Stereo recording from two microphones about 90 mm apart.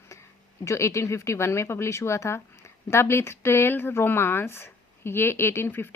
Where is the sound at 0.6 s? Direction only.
35° left (ahead or behind).